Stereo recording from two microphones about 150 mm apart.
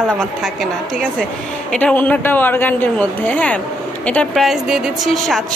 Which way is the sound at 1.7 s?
10° left (ahead or behind).